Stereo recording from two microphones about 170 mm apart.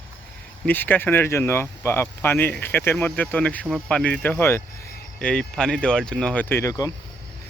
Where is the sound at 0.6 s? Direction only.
10° left (ahead or behind).